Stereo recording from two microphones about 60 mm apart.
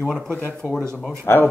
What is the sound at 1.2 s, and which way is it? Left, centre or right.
Speech, left.